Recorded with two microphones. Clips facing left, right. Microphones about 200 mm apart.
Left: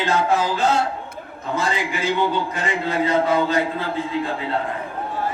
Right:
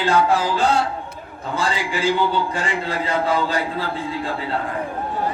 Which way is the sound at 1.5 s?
30° right (ahead or behind).